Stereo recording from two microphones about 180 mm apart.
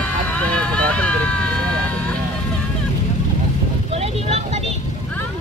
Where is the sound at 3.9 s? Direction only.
35° right (ahead or behind).